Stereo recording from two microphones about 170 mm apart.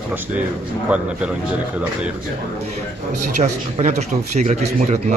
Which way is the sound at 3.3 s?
45° right (ahead or behind).